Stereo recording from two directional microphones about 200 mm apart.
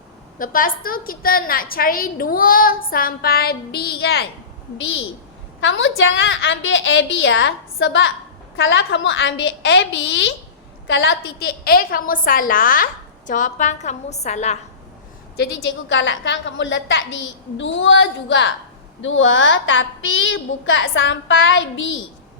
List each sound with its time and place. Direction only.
0.3 s a woman's voice: 45° left (ahead or behind)
5.5 s a woman's voice: 70° left (ahead or behind); by 14.6 s 35° left (ahead or behind)
15.4 s a woman's voice: 65° left (ahead or behind)